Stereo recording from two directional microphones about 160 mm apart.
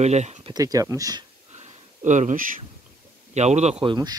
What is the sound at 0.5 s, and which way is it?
Speech, 20° right (ahead or behind).